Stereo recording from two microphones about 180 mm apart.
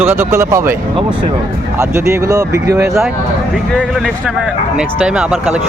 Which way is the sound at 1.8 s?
15° right (ahead or behind).